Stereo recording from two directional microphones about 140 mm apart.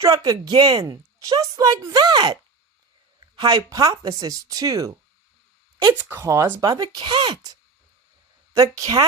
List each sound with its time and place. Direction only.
0.0 s a woman's voice: 25° right (ahead or behind)
5.9 s a woman's voice: 15° right (ahead or behind)